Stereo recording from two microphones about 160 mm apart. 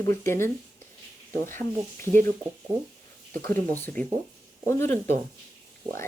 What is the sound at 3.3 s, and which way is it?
Speech, 10° left (ahead or behind).